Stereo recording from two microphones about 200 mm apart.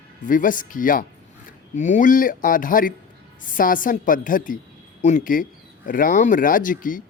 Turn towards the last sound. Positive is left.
turn(degrees=40)  # may be behind; listen again after turning